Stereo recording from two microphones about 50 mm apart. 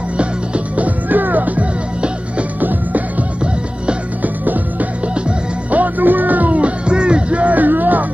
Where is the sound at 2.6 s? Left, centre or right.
Right.